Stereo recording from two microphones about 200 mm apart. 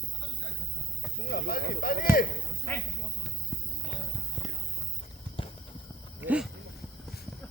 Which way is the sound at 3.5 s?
10° right (ahead or behind).